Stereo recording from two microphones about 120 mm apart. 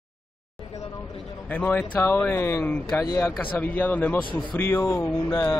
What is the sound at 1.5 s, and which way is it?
A man's voice, 15° left (ahead or behind).